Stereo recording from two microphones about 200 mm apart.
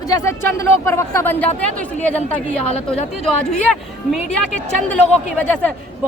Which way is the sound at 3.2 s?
Centre (ahead or behind).